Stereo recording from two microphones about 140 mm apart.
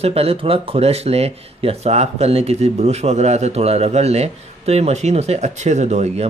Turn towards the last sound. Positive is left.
turn(degrees=-50)  # may be behind; listen again after turning